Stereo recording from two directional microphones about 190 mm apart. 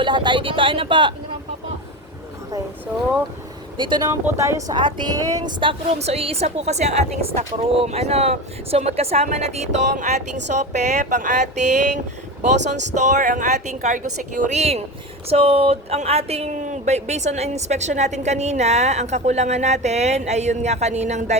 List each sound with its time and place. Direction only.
0.0 s speech: 25° right (ahead or behind)
3.8 s speech: 25° right (ahead or behind)